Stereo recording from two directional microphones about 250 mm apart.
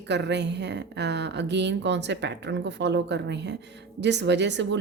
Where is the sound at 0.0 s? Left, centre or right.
Right.